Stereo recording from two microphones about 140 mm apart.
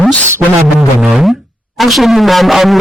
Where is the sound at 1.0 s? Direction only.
5° right (ahead or behind).